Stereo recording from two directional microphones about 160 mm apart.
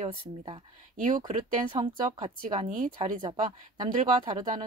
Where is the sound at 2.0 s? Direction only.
55° right (ahead or behind).